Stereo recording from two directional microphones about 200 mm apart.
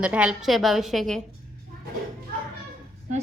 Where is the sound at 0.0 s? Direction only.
5° right (ahead or behind).